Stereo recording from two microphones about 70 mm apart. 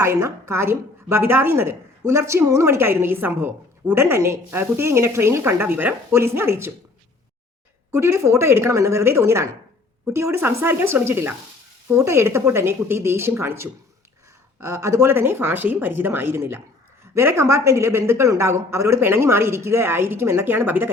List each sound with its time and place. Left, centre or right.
0.0 s a woman's voice: right
7.9 s a woman's voice: right
15.1 s a woman's voice: right